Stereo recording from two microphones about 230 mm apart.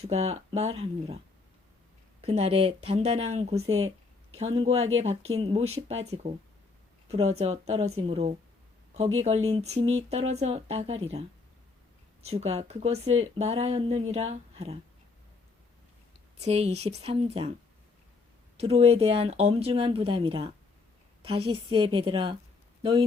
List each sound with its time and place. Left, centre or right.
0.0 s speech: right
2.2 s speech: right
7.1 s speech: right
12.2 s speech: right
16.4 s speech: right
18.5 s speech: right